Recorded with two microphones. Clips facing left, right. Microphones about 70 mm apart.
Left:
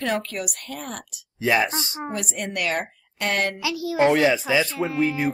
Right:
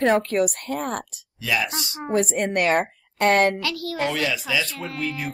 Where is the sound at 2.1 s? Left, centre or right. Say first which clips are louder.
Right 11 dB; right.